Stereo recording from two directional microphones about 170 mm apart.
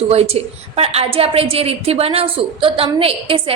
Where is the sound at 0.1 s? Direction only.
35° right (ahead or behind).